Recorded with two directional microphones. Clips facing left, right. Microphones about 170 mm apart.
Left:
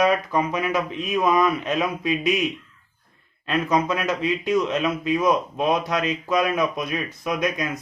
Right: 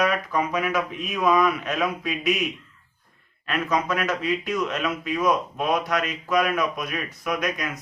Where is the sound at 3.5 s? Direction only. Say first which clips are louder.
Left 3 dB; 25° left (ahead or behind).